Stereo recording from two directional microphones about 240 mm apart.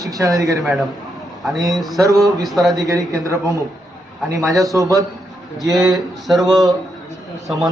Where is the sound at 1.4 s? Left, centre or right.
Centre.